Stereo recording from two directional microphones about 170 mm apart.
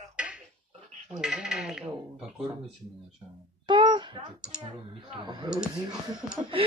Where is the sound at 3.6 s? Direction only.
30° right (ahead or behind).